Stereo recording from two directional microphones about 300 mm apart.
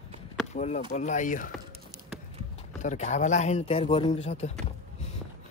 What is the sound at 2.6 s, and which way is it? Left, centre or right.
A man's voice, left.